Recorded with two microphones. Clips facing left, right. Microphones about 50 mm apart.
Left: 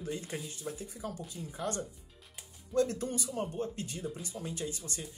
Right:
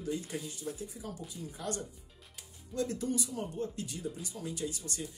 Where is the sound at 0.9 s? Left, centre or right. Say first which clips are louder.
Left 3 dB; left.